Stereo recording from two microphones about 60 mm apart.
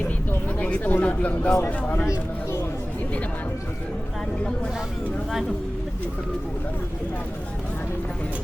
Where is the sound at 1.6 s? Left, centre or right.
Left.